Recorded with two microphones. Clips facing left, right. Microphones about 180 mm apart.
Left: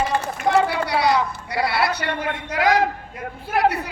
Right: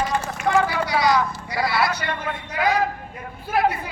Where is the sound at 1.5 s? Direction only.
65° left (ahead or behind); by 2.8 s 90° left.